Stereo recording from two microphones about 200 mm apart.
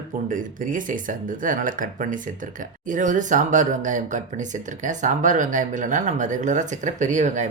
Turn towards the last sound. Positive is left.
turn(degrees=-35)  # may be behind; listen again after turning